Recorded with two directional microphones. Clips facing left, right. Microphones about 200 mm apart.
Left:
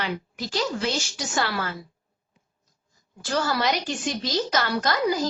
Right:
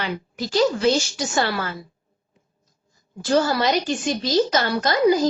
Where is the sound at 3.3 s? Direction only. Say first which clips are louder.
Right 5 dB; 25° right (ahead or behind).